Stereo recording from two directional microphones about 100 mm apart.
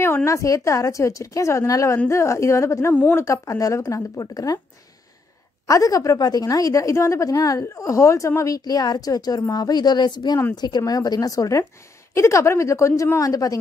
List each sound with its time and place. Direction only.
0.0 s a woman's voice: 25° left (ahead or behind)
2.9 s speech: 20° left (ahead or behind)
3.3 s a woman's voice: 35° left (ahead or behind)
5.7 s a woman's voice: 35° left (ahead or behind)